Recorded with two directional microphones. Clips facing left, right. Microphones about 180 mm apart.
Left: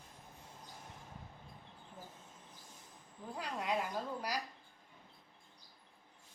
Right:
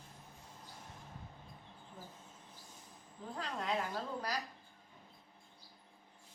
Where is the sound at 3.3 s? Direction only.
10° left (ahead or behind).